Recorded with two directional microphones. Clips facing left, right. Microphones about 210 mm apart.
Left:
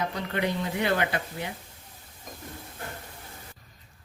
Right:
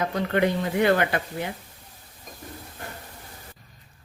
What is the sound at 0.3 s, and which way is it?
Speech, 50° right (ahead or behind).